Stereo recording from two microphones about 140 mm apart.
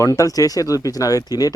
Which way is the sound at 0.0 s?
25° left (ahead or behind).